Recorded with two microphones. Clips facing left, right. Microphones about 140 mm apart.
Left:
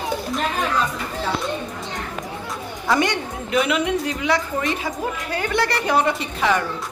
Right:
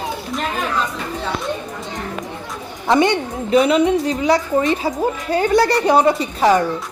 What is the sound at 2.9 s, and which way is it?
A woman's voice, 30° right (ahead or behind).